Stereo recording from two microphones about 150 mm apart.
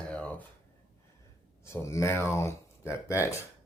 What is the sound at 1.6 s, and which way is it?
Speech, 20° left (ahead or behind).